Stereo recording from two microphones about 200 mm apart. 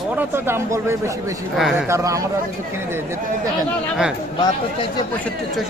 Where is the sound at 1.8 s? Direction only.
15° right (ahead or behind).